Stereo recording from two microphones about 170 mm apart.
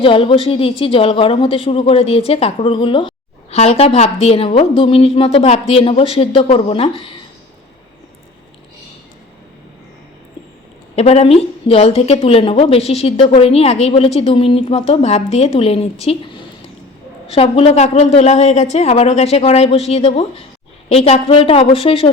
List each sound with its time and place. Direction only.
0.0 s a woman's voice: 30° left (ahead or behind)
10.9 s a woman's voice: 35° left (ahead or behind)